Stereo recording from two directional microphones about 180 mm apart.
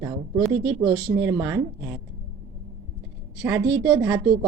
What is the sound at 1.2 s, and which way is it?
Speech, 15° right (ahead or behind).